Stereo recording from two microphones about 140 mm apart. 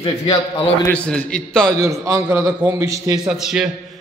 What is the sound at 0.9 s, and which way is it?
Speech, 10° left (ahead or behind).